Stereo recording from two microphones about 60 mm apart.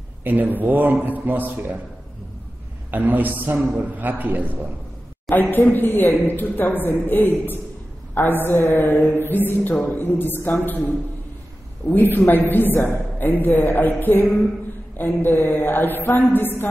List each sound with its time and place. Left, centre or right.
0.2 s a man's voice: right
2.9 s a man's voice: right
5.3 s a woman's voice: left